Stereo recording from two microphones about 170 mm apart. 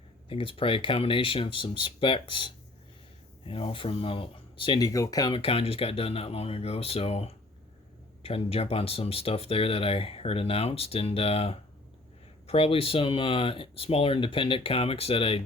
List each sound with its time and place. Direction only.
0.3 s speech: 30° left (ahead or behind)
5.3 s speech: 30° left (ahead or behind)